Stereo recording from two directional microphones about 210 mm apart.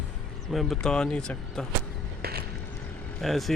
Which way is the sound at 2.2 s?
50° right (ahead or behind).